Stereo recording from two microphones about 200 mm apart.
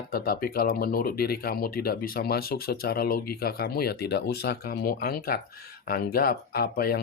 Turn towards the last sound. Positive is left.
turn(degrees=50)  # may be behind; listen again after turning